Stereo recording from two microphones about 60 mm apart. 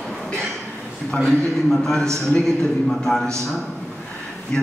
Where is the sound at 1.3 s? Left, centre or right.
Centre.